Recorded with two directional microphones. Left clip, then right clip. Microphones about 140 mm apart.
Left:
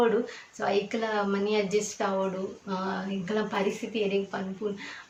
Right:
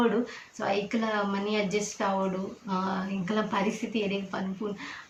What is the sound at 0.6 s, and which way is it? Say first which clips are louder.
A woman's voice: left 1 dB; 5° right (ahead or behind).